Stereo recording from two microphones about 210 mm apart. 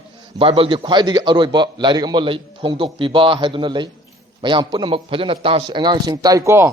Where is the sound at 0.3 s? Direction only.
25° right (ahead or behind).